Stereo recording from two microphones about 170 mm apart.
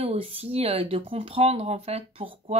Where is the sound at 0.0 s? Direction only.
35° right (ahead or behind).